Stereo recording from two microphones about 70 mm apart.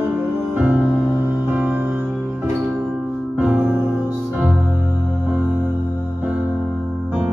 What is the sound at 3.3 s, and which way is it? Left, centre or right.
Music, right.